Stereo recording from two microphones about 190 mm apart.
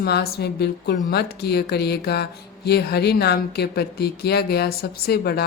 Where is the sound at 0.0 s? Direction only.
55° left (ahead or behind).